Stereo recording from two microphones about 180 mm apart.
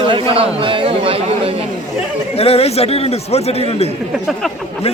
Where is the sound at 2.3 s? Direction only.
35° left (ahead or behind).